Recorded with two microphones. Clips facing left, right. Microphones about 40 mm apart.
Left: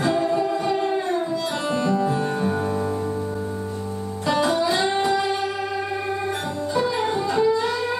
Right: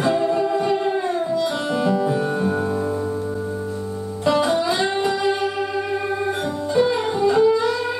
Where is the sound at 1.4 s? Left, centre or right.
Right.